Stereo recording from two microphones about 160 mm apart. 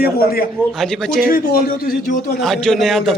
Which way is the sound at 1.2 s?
70° left (ahead or behind).